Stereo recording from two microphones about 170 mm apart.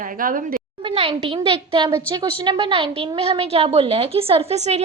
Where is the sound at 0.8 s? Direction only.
35° right (ahead or behind).